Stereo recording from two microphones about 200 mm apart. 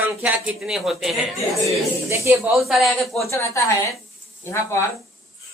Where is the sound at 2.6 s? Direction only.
Centre (ahead or behind).